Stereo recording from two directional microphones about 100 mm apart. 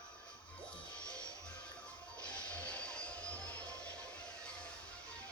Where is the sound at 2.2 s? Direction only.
10° left (ahead or behind).